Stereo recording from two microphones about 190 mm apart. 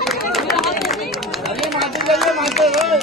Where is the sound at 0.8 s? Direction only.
Centre (ahead or behind).